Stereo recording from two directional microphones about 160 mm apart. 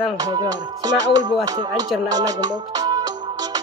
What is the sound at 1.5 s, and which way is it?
Music, 25° right (ahead or behind).